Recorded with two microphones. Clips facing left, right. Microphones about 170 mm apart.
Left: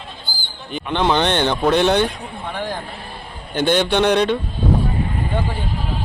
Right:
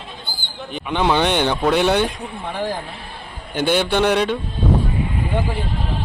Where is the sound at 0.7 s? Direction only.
5° right (ahead or behind).